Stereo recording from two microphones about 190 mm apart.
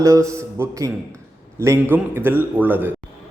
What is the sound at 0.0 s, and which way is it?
A man's voice, 15° right (ahead or behind).